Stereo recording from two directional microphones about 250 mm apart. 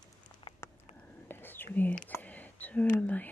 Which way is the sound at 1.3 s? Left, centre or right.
Centre.